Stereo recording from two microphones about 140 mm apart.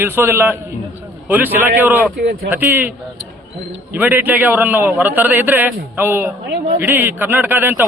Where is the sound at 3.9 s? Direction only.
15° right (ahead or behind).